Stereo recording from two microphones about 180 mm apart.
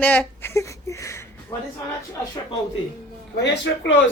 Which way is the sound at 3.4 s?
85° left.